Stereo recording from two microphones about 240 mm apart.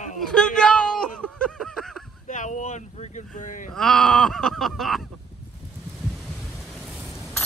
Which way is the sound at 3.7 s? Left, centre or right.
Centre.